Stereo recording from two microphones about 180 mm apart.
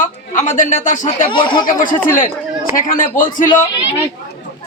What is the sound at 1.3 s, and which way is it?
Speech, 25° left (ahead or behind).